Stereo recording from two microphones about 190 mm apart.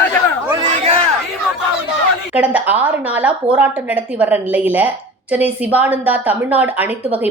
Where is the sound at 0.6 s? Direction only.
30° right (ahead or behind).